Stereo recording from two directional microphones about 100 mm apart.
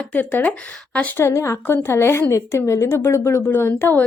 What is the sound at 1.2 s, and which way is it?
A woman's voice, 25° left (ahead or behind).